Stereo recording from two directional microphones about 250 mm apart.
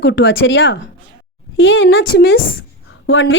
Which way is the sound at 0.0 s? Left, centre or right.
Left.